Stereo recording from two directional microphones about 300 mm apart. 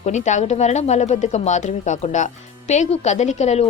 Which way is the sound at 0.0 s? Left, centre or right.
Left.